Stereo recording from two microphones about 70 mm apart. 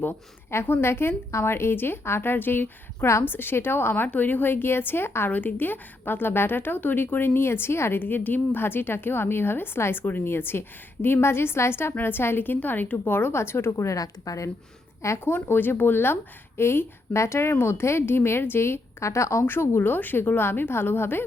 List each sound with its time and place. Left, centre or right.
0.5 s a woman's voice: left
8.0 s a woman's voice: left
13.7 s speech: left
15.0 s a woman's voice: left